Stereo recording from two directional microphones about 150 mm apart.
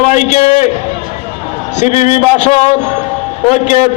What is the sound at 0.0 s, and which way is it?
Speech, 50° left (ahead or behind).